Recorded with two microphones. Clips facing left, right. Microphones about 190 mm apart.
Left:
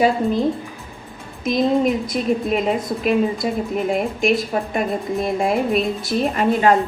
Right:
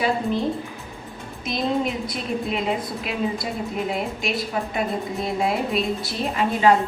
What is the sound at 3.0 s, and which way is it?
A woman's voice, 50° left (ahead or behind).